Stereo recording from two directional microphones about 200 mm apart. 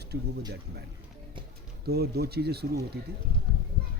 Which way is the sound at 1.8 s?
50° right (ahead or behind).